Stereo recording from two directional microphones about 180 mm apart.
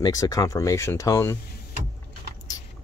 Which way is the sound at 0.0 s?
20° left (ahead or behind).